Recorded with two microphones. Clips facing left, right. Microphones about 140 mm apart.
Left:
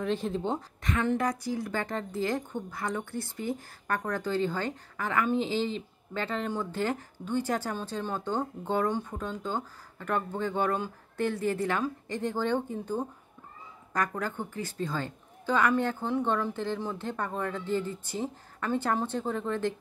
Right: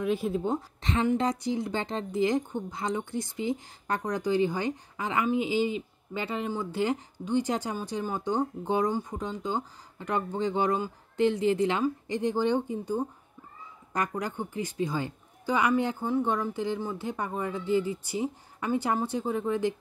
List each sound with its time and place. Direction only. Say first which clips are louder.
0.0 s a woman's voice: right 2 dB; 10° right (ahead or behind)
1.1 s a woman's voice: right 2 dB; 20° right (ahead or behind)